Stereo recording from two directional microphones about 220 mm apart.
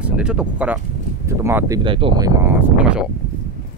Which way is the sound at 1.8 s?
25° right (ahead or behind).